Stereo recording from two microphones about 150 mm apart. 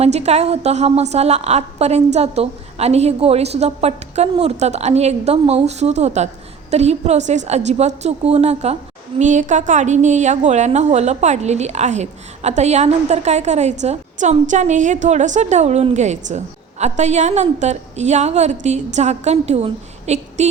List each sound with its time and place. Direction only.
0.0 s a woman's voice: 45° right (ahead or behind)